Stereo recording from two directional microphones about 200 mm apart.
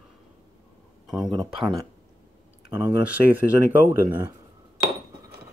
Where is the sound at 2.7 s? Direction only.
10° right (ahead or behind).